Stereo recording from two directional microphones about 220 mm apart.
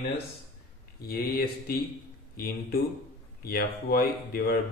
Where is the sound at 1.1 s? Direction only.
45° left (ahead or behind).